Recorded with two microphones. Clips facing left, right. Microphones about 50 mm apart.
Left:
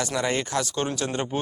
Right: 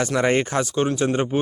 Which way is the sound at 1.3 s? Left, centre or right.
Centre.